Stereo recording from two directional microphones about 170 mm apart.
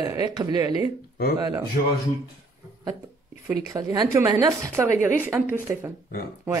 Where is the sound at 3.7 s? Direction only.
20° right (ahead or behind).